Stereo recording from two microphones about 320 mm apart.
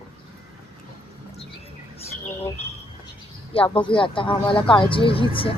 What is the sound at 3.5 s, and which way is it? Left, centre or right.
Speech, centre.